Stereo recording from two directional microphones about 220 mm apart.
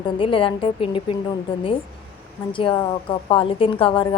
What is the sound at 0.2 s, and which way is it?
Speech, 25° left (ahead or behind).